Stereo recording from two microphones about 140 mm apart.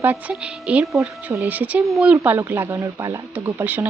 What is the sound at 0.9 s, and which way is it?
Speech, 20° right (ahead or behind).